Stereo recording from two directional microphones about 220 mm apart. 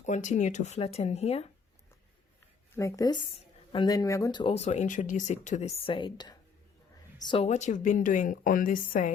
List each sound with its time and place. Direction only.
0.0 s a woman's voice: 35° left (ahead or behind)
2.7 s a woman's voice: 15° left (ahead or behind); by 9.1 s 35° left (ahead or behind)